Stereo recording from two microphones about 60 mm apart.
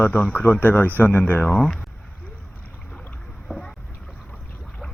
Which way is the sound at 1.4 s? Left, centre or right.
Centre.